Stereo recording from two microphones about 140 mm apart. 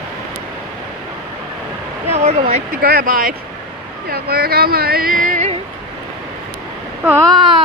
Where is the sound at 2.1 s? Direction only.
50° right (ahead or behind).